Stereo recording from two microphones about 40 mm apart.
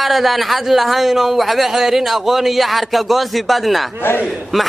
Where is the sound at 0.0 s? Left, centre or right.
Centre.